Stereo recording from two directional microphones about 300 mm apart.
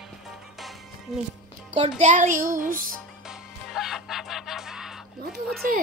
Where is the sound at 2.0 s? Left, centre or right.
Right.